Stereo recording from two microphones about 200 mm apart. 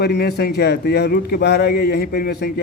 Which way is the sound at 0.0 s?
50° left (ahead or behind).